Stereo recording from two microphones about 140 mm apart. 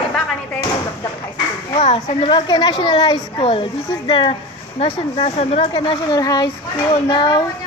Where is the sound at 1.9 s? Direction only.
30° left (ahead or behind).